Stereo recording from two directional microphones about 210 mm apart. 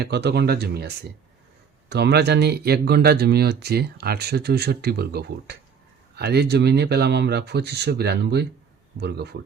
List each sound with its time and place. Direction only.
0.0 s speech: 50° right (ahead or behind)